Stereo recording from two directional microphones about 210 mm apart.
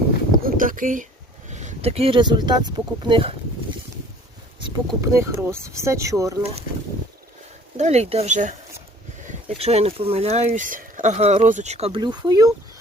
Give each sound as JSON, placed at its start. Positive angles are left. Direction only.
{"t": 0.3, "sound": "a sound", "side_deg": -40}
{"t": 1.5, "sound": "speech", "side_deg": -35}
{"t": 4.9, "sound": "speech", "side_deg": -15}
{"t": 7.8, "sound": "speech", "side_deg": -30}
{"t": 9.6, "sound": "speech", "side_deg": -30}